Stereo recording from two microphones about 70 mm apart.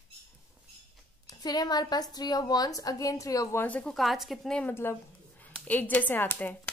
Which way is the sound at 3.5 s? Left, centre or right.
Left.